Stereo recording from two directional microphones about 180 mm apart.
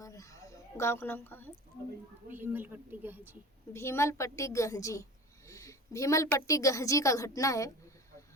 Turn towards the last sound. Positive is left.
turn(degrees=20)  # may be behind; listen again after turning